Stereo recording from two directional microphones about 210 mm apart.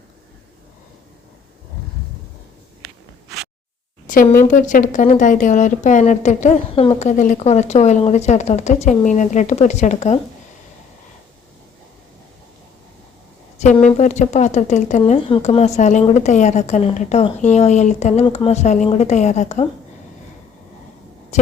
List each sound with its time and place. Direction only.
4.0 s speech: 40° left (ahead or behind)
13.6 s speech: 35° left (ahead or behind)